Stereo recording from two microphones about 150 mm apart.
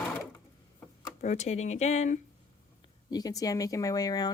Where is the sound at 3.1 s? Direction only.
25° left (ahead or behind).